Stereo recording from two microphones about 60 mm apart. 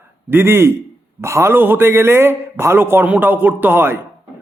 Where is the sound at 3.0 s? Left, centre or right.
Right.